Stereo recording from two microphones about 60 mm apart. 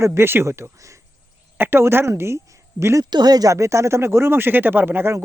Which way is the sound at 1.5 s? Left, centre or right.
Right.